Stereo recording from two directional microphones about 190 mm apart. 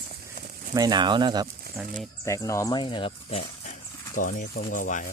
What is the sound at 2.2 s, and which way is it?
Speech, 15° left (ahead or behind).